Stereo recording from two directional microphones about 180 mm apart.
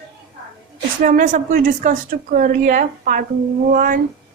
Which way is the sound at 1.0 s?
50° right (ahead or behind).